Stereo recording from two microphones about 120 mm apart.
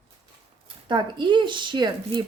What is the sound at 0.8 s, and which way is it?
A woman's voice, 40° right (ahead or behind).